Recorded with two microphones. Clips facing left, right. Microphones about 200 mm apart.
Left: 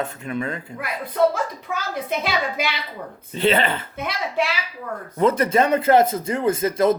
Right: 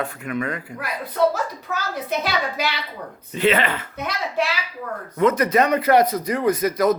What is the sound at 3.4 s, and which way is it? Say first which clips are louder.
Speech: even; 30° left (ahead or behind).